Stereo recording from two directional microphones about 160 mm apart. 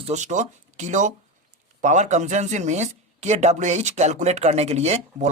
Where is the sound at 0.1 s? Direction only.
50° right (ahead or behind).